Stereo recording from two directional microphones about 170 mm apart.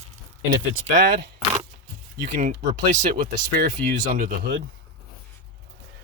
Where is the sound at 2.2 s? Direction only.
50° right (ahead or behind).